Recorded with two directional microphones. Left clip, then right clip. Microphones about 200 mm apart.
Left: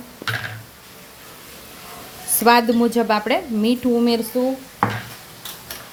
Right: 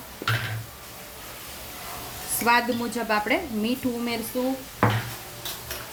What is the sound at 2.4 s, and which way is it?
A woman's voice, 40° left (ahead or behind).